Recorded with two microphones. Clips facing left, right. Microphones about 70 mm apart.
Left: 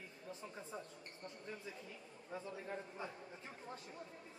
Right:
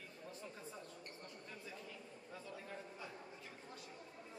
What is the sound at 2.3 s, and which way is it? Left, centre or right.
Speech, left.